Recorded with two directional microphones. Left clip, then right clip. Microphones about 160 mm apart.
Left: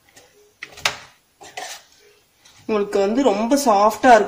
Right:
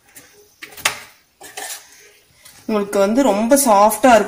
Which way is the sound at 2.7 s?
30° right (ahead or behind).